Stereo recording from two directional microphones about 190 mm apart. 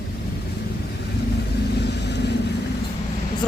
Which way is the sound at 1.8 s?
60° left (ahead or behind).